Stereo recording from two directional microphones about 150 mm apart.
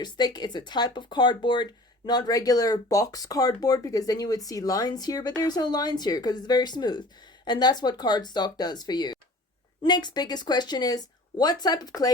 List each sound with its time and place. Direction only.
0.0 s speech: 30° left (ahead or behind)